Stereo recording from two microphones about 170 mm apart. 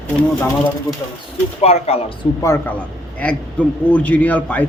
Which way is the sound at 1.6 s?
40° left (ahead or behind).